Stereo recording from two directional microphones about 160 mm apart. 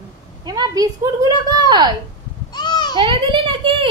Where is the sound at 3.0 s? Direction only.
35° right (ahead or behind).